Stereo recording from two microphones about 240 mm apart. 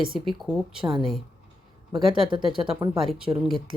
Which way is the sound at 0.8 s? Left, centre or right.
Right.